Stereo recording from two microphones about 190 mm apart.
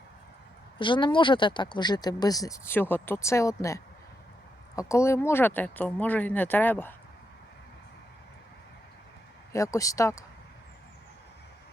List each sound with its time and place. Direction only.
0.8 s speech: 25° left (ahead or behind); by 6.9 s 10° left (ahead or behind)
9.5 s speech: 15° left (ahead or behind)